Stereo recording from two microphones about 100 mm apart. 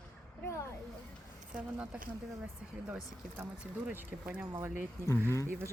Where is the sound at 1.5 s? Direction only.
10° right (ahead or behind).